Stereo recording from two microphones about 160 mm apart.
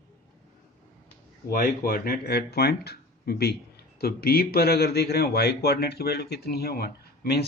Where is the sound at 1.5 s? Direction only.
70° left (ahead or behind).